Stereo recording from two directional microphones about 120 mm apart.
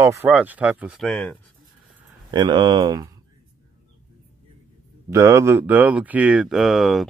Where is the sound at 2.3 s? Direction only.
40° right (ahead or behind).